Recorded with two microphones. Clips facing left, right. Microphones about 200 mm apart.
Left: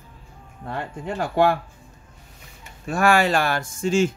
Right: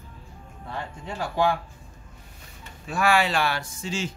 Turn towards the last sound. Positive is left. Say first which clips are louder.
# left 11 dB
turn(degrees=50)  # may be behind; listen again after turning